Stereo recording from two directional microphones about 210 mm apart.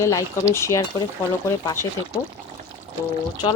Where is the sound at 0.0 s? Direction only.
15° left (ahead or behind).